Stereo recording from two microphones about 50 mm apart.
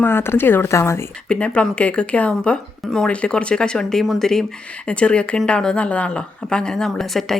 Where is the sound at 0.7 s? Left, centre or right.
Left.